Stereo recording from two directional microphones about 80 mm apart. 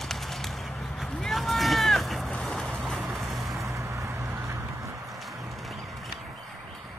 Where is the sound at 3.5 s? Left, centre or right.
Right.